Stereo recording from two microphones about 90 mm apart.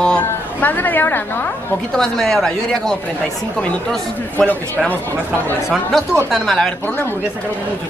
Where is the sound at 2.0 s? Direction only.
5° left (ahead or behind).